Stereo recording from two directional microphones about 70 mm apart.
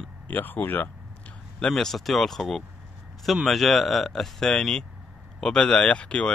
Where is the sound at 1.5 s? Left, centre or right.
Centre.